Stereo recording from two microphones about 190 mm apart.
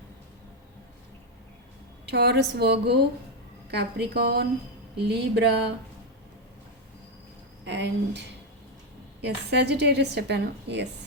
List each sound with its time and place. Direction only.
2.0 s a woman's voice: 60° right (ahead or behind)
7.6 s a woman's voice: 65° right (ahead or behind)